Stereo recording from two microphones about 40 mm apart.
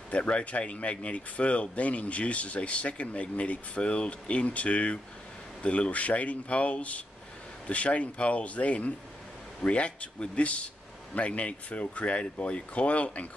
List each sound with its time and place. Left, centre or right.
0.1 s speech: left